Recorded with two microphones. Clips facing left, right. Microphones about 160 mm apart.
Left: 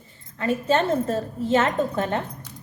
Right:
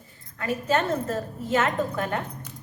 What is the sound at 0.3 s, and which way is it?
A woman's voice, 30° left (ahead or behind).